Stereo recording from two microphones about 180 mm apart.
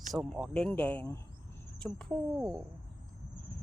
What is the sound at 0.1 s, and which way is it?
Speech, centre (ahead or behind).